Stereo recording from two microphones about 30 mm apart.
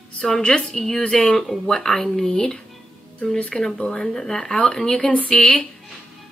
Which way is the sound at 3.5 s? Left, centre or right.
Centre.